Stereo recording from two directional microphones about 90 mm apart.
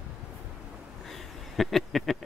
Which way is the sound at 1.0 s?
Centre (ahead or behind).